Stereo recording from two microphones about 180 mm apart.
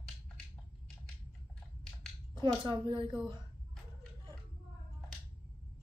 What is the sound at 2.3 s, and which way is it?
A woman's voice, 25° right (ahead or behind).